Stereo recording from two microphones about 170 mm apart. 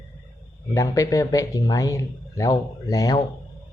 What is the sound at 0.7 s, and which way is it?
Speech, 20° left (ahead or behind).